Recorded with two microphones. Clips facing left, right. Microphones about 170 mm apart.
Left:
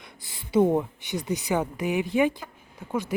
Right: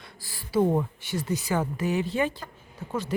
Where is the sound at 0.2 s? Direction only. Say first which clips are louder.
Left 3 dB; 20° left (ahead or behind).